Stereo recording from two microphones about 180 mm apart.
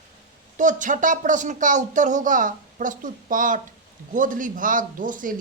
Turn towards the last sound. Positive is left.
turn(degrees=-45)  # may be behind; listen again after turning